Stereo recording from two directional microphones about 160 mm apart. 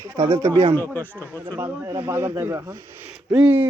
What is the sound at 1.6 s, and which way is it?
Speech, 15° right (ahead or behind).